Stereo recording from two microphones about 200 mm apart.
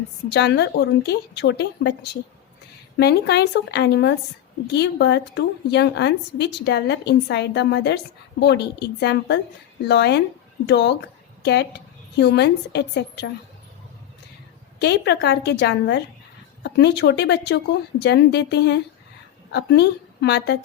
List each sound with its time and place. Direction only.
0.3 s a woman's voice: 55° left (ahead or behind)
12.1 s a woman's voice: 55° left (ahead or behind)
14.8 s a woman's voice: 55° left (ahead or behind)